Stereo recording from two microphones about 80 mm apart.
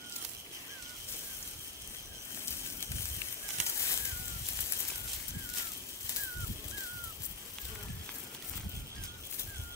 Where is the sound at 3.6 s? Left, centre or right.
Left.